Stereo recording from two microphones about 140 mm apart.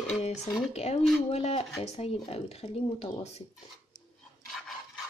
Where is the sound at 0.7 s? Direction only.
50° left (ahead or behind).